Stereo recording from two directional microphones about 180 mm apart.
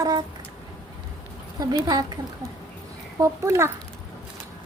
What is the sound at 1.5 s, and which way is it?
Speech, 20° right (ahead or behind).